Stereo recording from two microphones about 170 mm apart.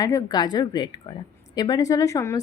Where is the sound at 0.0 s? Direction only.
20° left (ahead or behind).